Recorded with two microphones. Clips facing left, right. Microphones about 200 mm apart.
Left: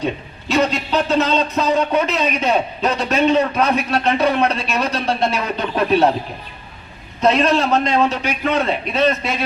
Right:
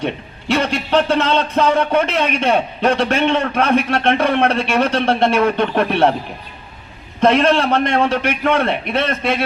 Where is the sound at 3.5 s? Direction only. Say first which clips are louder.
Right 2 dB; 55° right (ahead or behind).